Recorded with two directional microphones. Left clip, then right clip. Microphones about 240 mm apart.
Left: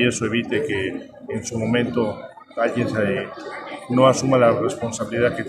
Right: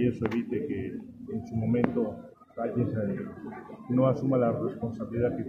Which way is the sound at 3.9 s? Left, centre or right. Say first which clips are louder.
Left 10 dB; left.